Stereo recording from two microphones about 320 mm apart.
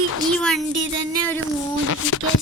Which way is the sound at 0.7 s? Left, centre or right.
Right.